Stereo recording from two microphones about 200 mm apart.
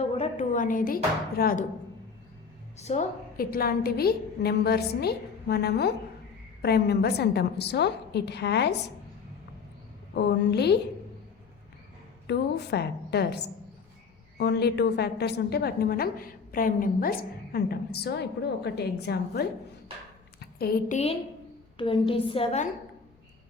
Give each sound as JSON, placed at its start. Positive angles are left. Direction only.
{"t": 0.2, "sound": "a woman's voice", "side_deg": 40}
{"t": 2.7, "sound": "a woman's voice", "side_deg": 35}
{"t": 10.2, "sound": "a woman's voice", "side_deg": 55}
{"t": 12.3, "sound": "a woman's voice", "side_deg": 55}